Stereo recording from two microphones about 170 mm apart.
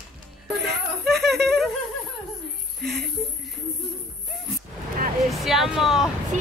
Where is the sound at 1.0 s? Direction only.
Centre (ahead or behind).